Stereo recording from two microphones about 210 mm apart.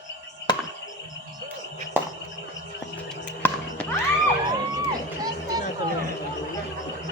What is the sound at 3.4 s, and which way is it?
Music, 10° left (ahead or behind).